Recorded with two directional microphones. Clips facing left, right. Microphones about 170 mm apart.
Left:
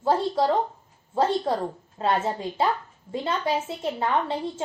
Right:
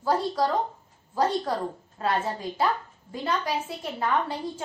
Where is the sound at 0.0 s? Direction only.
25° left (ahead or behind).